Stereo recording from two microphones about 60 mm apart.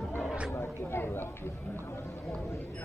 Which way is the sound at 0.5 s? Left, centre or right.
Left.